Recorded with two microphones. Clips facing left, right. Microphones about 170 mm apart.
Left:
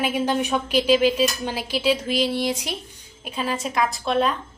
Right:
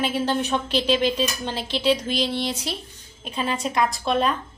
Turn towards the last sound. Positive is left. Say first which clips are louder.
# even
turn(degrees=0)  # may be behind; listen again after turning